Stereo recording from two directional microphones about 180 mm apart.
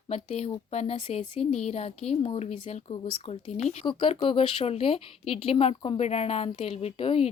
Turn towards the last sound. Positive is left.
turn(degrees=30)  # may be behind; listen again after turning